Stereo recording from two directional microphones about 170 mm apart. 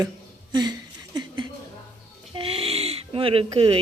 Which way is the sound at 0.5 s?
25° right (ahead or behind).